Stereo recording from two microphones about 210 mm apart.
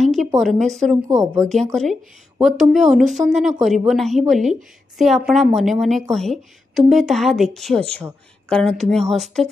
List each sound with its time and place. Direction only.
0.0 s a sound: centre (ahead or behind)
0.4 s a woman's voice: centre (ahead or behind)
1.0 s speech: 15° right (ahead or behind)
1.5 s a woman's voice: centre (ahead or behind)